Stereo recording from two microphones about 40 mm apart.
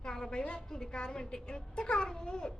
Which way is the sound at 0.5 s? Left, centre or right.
Centre.